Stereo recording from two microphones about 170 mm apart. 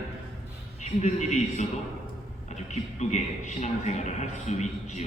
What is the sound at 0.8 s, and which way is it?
A man's voice, 45° left (ahead or behind).